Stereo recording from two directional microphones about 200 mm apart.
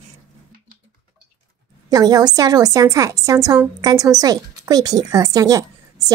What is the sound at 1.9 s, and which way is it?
A woman's voice, 20° right (ahead or behind).